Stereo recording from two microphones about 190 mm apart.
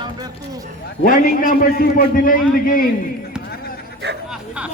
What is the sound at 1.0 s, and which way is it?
A man's voice, 45° left (ahead or behind).